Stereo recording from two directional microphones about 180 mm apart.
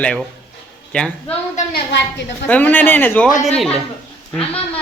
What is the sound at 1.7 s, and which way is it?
Speech, 70° left (ahead or behind).